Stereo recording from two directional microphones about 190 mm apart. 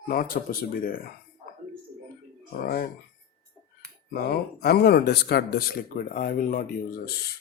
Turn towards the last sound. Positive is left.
turn(degrees=45)  # may be behind; listen again after turning